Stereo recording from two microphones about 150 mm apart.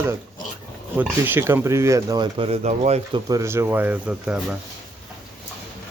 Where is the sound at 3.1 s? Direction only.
25° right (ahead or behind); by 4.5 s 5° right (ahead or behind).